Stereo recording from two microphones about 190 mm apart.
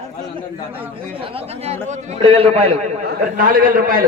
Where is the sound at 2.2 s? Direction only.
30° right (ahead or behind).